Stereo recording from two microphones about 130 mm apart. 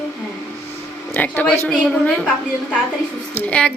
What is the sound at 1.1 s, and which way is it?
Speech, 15° left (ahead or behind).